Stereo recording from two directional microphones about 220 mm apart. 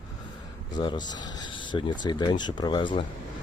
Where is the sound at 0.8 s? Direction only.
20° left (ahead or behind).